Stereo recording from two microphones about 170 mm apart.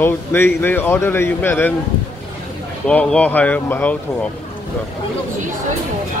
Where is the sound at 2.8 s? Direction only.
5° left (ahead or behind).